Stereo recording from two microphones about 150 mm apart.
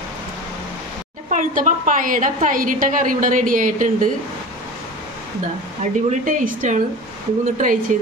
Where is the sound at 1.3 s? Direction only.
60° right (ahead or behind).